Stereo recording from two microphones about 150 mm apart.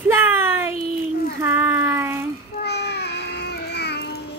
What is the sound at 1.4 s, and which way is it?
Child singing, 15° right (ahead or behind).